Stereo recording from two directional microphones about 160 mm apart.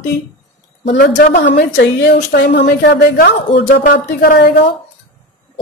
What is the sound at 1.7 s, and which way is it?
A woman's voice, 90° left.